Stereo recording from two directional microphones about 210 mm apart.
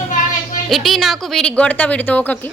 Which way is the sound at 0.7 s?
Centre (ahead or behind).